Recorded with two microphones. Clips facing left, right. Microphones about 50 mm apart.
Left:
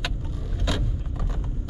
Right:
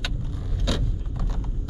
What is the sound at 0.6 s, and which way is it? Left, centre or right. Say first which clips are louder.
Vehicle: even; centre.